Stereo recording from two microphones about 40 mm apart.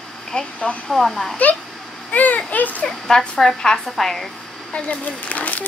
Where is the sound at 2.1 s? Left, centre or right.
Left.